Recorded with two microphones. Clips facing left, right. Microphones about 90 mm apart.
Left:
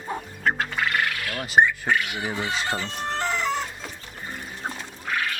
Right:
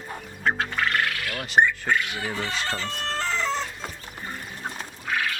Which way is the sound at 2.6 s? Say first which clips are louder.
Left 1 dB; 15° left (ahead or behind).